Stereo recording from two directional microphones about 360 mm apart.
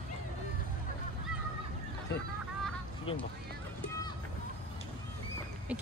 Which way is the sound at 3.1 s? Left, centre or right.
Centre.